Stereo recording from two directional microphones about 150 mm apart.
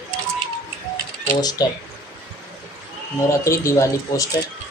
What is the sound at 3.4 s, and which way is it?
Speech, 20° left (ahead or behind).